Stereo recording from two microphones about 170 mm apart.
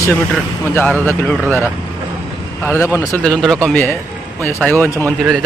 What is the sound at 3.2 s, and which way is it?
Speech, 5° left (ahead or behind).